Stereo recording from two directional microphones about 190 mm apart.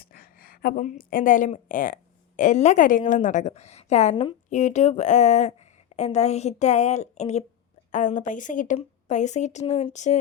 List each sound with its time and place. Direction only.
0.0 s a woman's voice: 50° left (ahead or behind)
4.1 s a woman's voice: 25° left (ahead or behind)
4.4 s speech: 40° left (ahead or behind)